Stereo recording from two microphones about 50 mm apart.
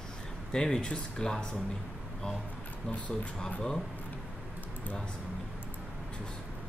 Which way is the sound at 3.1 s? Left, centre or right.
Left.